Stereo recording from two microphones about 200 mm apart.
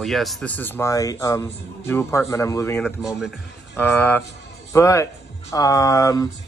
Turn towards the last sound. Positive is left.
turn(degrees=15)  # may be behind; listen again after turning